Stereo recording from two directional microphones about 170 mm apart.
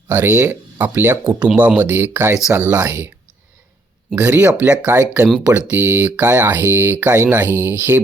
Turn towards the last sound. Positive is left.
turn(degrees=-10)  # may be behind; listen again after turning